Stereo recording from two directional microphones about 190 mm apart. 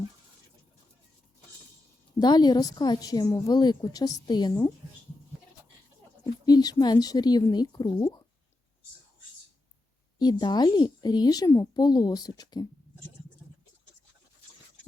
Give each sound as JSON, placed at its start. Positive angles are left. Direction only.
{"t": 2.1, "sound": "a woman's voice", "side_deg": 20}
{"t": 6.4, "sound": "a woman's voice", "side_deg": 20}
{"t": 10.2, "sound": "a woman's voice", "side_deg": 20}